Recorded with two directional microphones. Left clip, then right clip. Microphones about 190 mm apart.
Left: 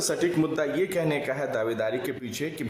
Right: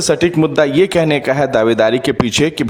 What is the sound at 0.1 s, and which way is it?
Speech, 45° right (ahead or behind).